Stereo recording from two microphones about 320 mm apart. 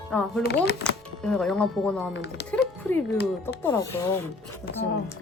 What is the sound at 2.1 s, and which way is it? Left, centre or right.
Speech, left.